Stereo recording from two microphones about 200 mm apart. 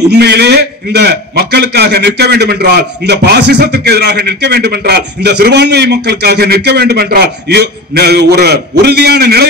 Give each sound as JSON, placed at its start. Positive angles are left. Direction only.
{"t": 0.1, "sound": "a man's voice", "side_deg": -55}